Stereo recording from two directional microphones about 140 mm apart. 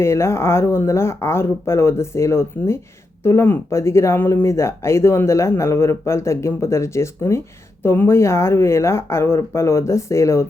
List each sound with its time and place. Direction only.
0.0 s speech: 20° left (ahead or behind)